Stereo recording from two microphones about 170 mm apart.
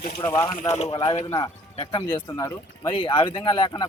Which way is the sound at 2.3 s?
20° left (ahead or behind).